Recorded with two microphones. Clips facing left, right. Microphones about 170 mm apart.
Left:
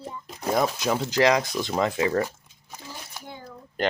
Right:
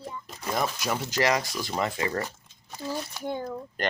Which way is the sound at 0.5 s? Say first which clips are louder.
Left 4 dB; 15° left (ahead or behind).